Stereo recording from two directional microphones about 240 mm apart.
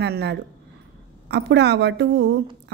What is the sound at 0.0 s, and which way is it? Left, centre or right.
A woman's voice, right.